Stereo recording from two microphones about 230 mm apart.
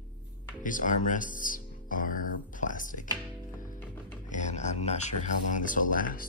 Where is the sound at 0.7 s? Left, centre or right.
Left.